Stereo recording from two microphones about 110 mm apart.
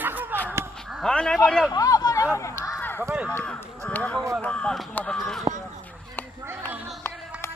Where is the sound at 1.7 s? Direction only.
35° left (ahead or behind).